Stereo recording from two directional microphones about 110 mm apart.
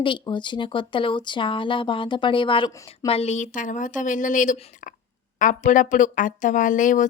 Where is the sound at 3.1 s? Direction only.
75° left (ahead or behind).